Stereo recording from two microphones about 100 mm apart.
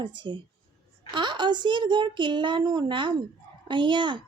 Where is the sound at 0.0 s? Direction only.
50° right (ahead or behind).